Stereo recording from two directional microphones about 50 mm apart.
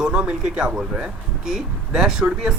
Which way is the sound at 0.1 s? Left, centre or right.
Right.